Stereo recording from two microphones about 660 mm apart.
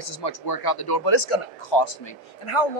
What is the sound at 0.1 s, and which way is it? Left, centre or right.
Speech, left.